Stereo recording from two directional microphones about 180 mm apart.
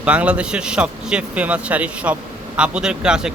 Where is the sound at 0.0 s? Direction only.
5° right (ahead or behind).